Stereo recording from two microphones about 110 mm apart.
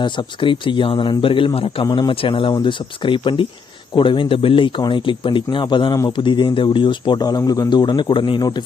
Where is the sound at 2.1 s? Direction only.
55° left (ahead or behind).